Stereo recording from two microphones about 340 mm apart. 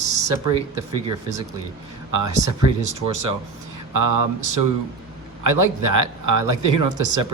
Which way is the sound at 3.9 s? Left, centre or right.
Right.